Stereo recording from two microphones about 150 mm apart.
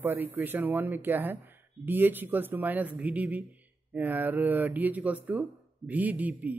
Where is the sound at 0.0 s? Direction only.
15° right (ahead or behind).